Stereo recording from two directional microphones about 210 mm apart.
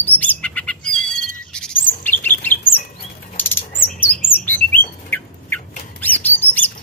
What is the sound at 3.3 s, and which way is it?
Bird, 10° left (ahead or behind).